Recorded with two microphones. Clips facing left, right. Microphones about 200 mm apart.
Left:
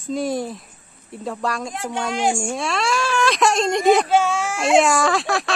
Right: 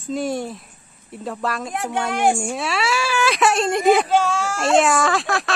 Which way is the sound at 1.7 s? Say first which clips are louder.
Right 2 dB; 60° right (ahead or behind).